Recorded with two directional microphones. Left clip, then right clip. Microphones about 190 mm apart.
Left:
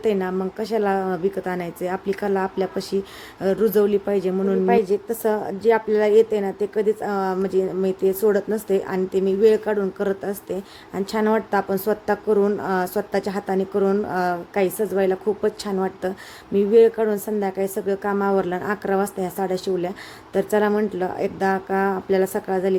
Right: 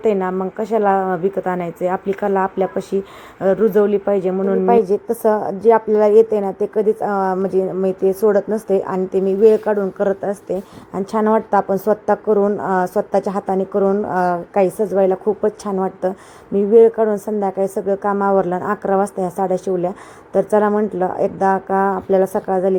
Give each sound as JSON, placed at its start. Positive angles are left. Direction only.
{"t": 0.0, "sound": "a woman's voice", "side_deg": 15}
{"t": 4.7, "sound": "speech", "side_deg": 0}
{"t": 5.3, "sound": "a woman's voice", "side_deg": 15}
{"t": 5.6, "sound": "speech", "side_deg": 0}
{"t": 7.0, "sound": "a woman's voice", "side_deg": 20}
{"t": 7.5, "sound": "speech", "side_deg": 5}
{"t": 8.3, "sound": "a woman's voice", "side_deg": 20}
{"t": 11.7, "sound": "speech", "side_deg": 20}
{"t": 12.6, "sound": "a woman's voice", "side_deg": 5}
{"t": 14.5, "sound": "a woman's voice", "side_deg": 5}
{"t": 22.4, "sound": "speech", "side_deg": 20}